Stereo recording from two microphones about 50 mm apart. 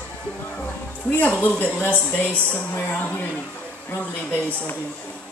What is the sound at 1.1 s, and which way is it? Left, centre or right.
A woman's voice, left.